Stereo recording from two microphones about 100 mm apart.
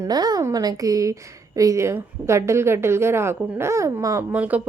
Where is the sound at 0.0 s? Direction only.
40° right (ahead or behind).